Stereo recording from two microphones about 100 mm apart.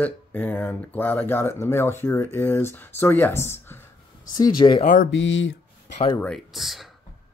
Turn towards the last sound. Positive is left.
turn(degrees=0)  # may be behind; listen again after turning